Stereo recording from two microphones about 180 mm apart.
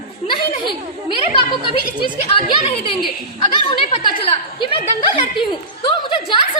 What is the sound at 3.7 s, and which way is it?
A woman's voice, 30° left (ahead or behind).